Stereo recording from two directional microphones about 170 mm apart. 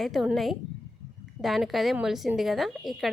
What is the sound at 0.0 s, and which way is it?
A woman's voice, centre (ahead or behind).